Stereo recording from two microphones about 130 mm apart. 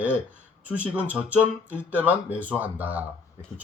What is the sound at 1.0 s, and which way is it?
Speech, 10° right (ahead or behind).